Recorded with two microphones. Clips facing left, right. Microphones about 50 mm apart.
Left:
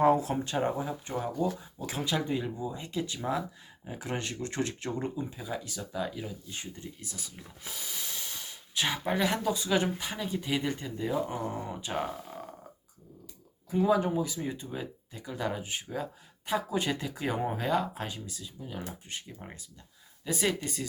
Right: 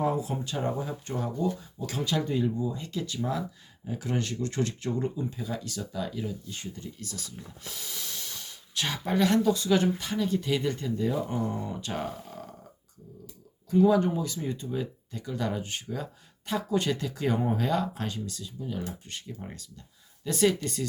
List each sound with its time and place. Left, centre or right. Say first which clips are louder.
0.0 s a sound: left 4 dB; left
0.3 s speech: left 2 dB; left
0.8 s speech: right 1 dB; centre
13.7 s speech: right 4 dB; centre